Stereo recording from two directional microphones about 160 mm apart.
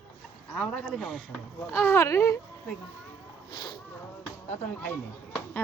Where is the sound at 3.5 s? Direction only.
25° left (ahead or behind).